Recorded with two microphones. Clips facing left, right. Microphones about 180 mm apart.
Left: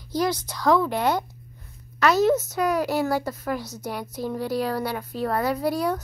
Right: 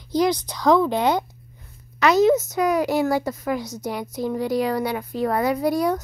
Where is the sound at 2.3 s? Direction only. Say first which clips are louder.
Right 3 dB; 5° left (ahead or behind).